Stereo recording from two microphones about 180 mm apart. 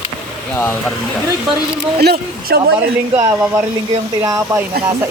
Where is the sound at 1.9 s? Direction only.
60° right (ahead or behind).